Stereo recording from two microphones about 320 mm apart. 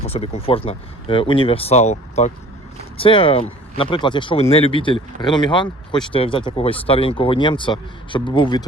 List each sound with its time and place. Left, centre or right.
0.0 s speech: centre